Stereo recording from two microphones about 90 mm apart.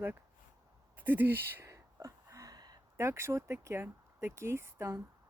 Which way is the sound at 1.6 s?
35° right (ahead or behind).